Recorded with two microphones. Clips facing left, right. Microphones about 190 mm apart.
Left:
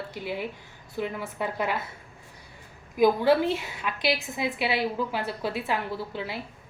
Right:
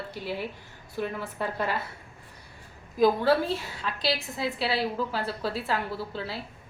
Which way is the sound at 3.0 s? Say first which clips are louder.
Left 2 dB; 15° left (ahead or behind).